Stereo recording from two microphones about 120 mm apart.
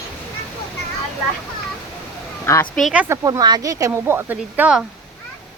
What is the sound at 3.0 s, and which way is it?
Speech, 25° right (ahead or behind).